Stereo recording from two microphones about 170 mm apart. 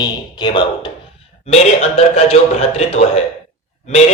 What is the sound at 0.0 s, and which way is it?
Speech, 25° left (ahead or behind).